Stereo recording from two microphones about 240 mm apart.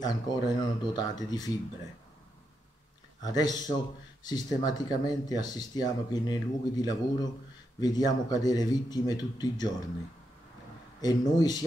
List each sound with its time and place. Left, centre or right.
0.0 s speech: centre
3.2 s speech: centre
11.0 s speech: centre